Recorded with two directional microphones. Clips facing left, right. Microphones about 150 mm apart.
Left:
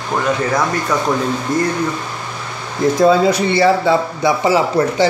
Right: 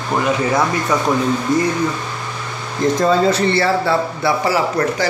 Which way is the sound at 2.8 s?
10° left (ahead or behind).